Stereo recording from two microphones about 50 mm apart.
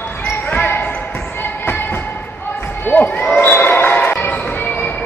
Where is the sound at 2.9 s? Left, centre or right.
Left.